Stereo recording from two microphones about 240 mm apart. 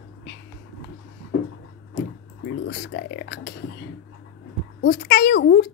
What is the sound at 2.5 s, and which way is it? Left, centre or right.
A woman's voice, left.